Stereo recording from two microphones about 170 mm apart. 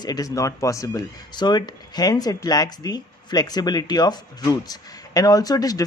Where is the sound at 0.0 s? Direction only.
20° left (ahead or behind).